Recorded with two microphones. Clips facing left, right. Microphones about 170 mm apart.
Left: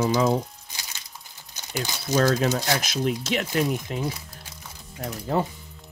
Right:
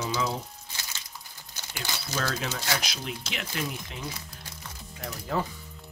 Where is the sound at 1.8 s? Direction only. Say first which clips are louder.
Left 10 dB; 40° left (ahead or behind).